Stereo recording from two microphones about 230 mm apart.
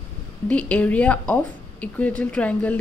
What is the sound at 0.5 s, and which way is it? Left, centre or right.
A woman's voice, centre.